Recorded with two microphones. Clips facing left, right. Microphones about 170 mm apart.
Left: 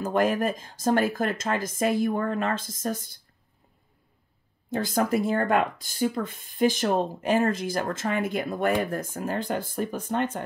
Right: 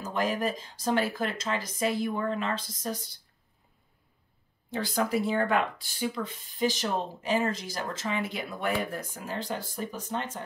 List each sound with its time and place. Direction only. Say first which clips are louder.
0.0 s speech: left 5 dB; 55° left (ahead or behind)
4.6 s speech: left 4 dB; 45° left (ahead or behind)